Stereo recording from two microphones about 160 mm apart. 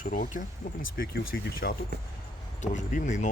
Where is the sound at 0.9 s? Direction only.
75° left (ahead or behind).